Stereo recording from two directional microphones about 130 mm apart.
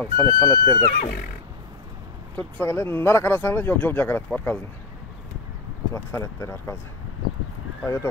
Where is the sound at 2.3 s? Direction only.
15° left (ahead or behind).